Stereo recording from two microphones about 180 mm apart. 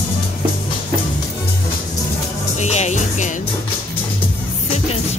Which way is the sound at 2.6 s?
40° left (ahead or behind).